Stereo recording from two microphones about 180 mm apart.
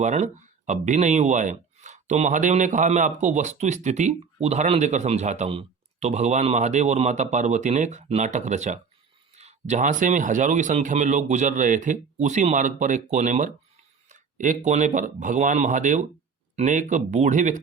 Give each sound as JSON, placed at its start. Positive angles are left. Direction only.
{"t": 0.0, "sound": "speech", "side_deg": -40}